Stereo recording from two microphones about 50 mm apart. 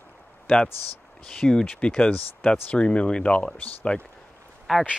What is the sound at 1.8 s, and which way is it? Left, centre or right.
Speech, left.